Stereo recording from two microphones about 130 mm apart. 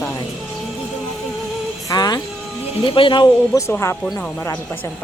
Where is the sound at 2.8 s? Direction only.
40° left (ahead or behind).